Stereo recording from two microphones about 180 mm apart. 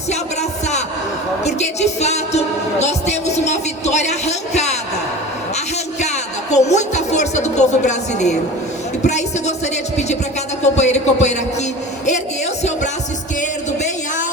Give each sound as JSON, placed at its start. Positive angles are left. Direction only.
{"t": 1.5, "sound": "music", "side_deg": 40}
{"t": 6.0, "sound": "music", "side_deg": 40}
{"t": 9.0, "sound": "speech", "side_deg": 40}
{"t": 10.6, "sound": "a man's voice", "side_deg": 40}